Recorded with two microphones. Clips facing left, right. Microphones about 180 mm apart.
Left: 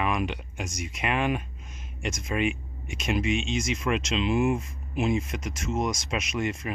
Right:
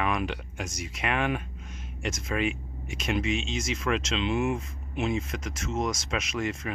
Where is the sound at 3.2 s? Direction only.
40° right (ahead or behind).